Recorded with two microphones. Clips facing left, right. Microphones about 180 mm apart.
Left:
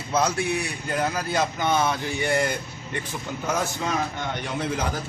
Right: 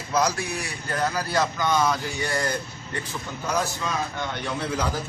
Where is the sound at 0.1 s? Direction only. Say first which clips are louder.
Left 1 dB; 25° left (ahead or behind).